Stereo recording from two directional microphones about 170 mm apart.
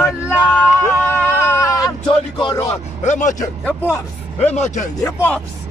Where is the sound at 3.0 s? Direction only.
45° left (ahead or behind).